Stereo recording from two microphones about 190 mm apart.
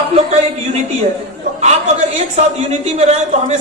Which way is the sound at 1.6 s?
35° right (ahead or behind).